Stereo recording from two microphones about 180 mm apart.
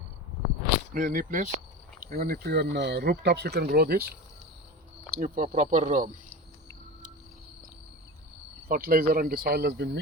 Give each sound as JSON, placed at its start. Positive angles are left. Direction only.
{"t": 0.9, "sound": "speech", "side_deg": -50}
{"t": 5.1, "sound": "speech", "side_deg": -45}
{"t": 8.7, "sound": "speech", "side_deg": -55}